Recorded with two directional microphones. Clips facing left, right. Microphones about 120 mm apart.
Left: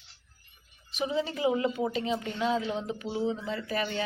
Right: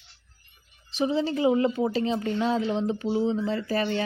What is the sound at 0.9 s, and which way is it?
Speech, 30° right (ahead or behind).